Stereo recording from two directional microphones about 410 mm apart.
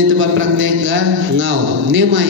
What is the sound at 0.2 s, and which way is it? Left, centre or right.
A man's voice, right.